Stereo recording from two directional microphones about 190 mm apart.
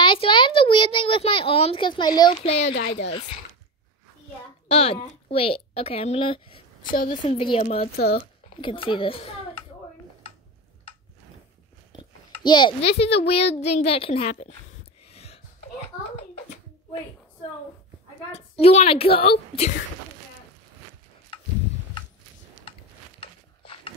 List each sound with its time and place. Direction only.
0.0 s a child's voice: 25° left (ahead or behind)
2.6 s speech: 65° left (ahead or behind)
4.6 s a woman's voice: 30° left (ahead or behind)
7.9 s speech: 55° left (ahead or behind)
8.5 s a child's voice: 25° left (ahead or behind)
12.0 s a child's voice: 25° left (ahead or behind)
15.0 s a sound: 30° left (ahead or behind)
18.3 s a woman's voice: 35° left (ahead or behind)
23.2 s a sound: 30° left (ahead or behind)